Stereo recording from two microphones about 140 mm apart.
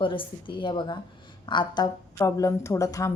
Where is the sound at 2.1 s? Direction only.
20° left (ahead or behind).